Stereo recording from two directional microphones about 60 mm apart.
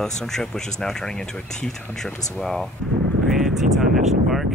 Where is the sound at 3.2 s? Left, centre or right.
Centre.